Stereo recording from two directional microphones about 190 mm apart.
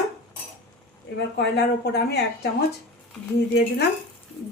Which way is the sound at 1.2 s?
60° left (ahead or behind).